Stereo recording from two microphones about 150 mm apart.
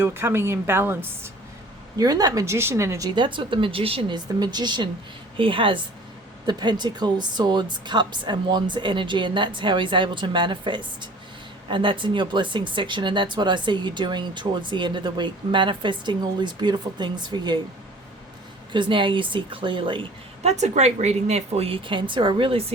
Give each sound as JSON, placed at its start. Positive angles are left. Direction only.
{"t": 0.0, "sound": "a woman's voice", "side_deg": -15}
{"t": 3.2, "sound": "speech", "side_deg": -35}
{"t": 18.7, "sound": "speech", "side_deg": -30}